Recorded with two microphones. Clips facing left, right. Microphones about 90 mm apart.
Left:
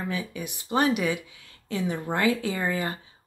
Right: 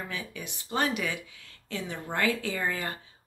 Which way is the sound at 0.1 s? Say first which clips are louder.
Left 6 dB; 15° left (ahead or behind).